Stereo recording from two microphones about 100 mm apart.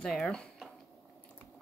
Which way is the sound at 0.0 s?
5° left (ahead or behind).